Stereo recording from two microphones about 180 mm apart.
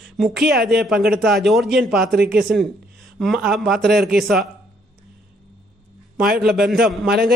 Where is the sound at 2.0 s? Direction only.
60° right (ahead or behind).